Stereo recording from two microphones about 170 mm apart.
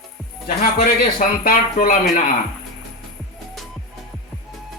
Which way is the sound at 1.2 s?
50° left (ahead or behind).